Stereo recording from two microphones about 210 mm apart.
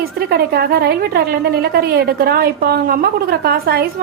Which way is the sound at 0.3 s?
45° right (ahead or behind).